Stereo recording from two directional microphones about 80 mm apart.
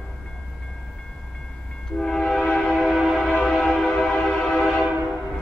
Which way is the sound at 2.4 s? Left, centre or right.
Centre.